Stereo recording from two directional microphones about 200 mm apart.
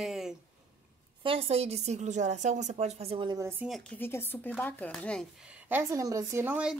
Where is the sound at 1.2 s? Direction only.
30° right (ahead or behind).